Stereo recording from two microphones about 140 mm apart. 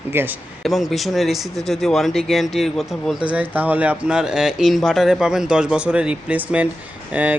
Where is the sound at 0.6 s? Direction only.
Centre (ahead or behind).